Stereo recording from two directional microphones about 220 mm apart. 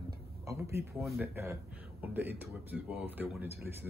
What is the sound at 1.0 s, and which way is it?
Speech, centre (ahead or behind).